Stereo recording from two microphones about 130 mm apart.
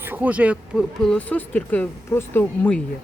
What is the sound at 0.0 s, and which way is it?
Speech, 15° right (ahead or behind).